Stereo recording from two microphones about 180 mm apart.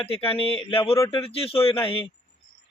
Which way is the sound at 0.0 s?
30° left (ahead or behind).